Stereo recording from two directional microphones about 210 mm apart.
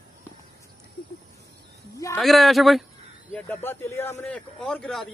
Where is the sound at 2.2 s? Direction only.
Centre (ahead or behind).